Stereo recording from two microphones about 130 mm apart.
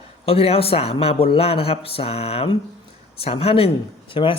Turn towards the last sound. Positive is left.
turn(degrees=40)  # may be behind; listen again after turning